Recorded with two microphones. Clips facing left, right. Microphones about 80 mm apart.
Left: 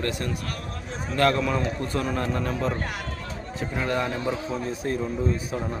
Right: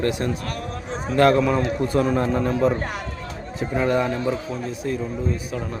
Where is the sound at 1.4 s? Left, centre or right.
Centre.